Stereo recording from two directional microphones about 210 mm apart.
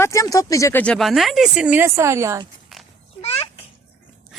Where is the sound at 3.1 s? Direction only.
30° left (ahead or behind).